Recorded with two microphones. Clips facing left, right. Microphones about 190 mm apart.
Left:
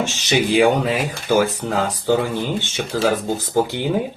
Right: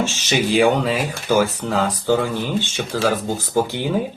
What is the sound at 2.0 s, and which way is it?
Speech, 15° left (ahead or behind).